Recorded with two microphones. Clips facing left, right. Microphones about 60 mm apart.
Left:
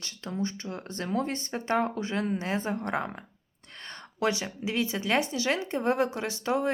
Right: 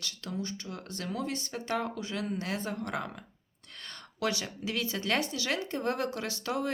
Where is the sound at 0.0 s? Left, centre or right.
Left.